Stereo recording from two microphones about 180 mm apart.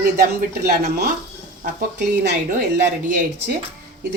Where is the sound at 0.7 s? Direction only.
60° right (ahead or behind).